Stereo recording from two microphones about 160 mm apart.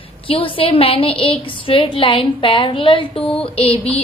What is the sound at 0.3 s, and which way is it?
A woman's voice, 35° left (ahead or behind).